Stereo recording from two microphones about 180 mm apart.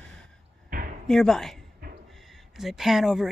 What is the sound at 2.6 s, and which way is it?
Speech, centre (ahead or behind).